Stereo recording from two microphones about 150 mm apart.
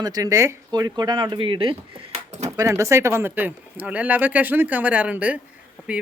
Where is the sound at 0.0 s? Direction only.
25° right (ahead or behind).